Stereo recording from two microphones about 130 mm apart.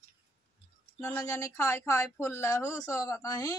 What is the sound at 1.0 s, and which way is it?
Speech, 15° left (ahead or behind).